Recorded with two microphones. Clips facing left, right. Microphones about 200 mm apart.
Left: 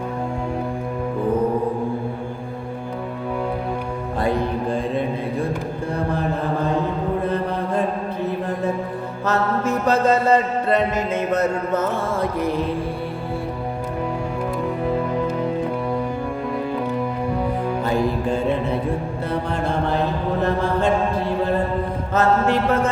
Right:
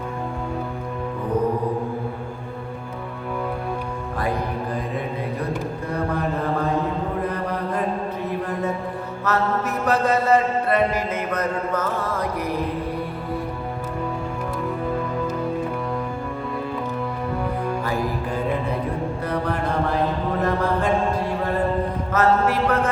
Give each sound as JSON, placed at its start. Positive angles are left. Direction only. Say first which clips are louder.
{"t": 7.3, "sound": "mantra", "louder": "left 3 dB", "side_deg": 25}
{"t": 9.2, "sound": "mantra", "louder": "left 2 dB", "side_deg": 25}
{"t": 17.8, "sound": "music", "louder": "left 4 dB", "side_deg": 25}
{"t": 20.4, "sound": "mantra", "louder": "left 2 dB", "side_deg": 25}
{"t": 22.1, "sound": "mantra", "louder": "left 1 dB", "side_deg": 25}